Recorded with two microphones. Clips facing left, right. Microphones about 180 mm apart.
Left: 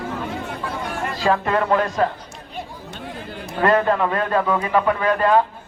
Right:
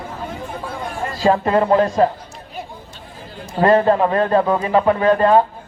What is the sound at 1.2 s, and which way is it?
Speech, 30° right (ahead or behind).